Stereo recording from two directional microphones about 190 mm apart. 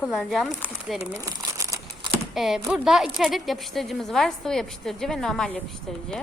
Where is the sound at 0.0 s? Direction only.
5° left (ahead or behind).